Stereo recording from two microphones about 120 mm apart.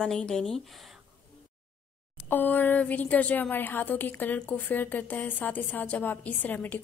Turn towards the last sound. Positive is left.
turn(degrees=15)  # may be behind; listen again after turning